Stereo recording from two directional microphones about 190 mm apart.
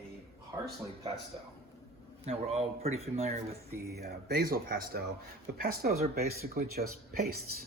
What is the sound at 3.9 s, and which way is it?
Speech, 55° right (ahead or behind).